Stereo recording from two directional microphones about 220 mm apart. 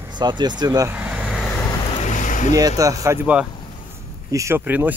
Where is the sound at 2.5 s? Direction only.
15° right (ahead or behind).